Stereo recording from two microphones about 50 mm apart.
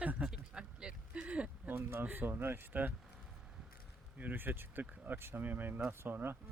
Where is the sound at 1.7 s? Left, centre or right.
Right.